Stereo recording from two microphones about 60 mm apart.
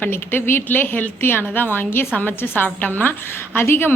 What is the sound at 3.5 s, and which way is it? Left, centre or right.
Speech, left.